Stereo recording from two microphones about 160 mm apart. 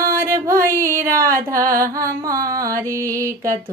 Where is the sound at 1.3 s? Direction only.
60° right (ahead or behind).